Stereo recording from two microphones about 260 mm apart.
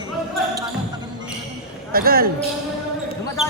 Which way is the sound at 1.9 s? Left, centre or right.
Right.